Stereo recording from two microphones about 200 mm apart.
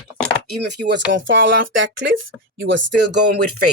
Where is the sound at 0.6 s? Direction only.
60° right (ahead or behind).